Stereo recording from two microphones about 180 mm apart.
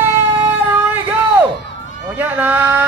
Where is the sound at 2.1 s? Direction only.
10° right (ahead or behind).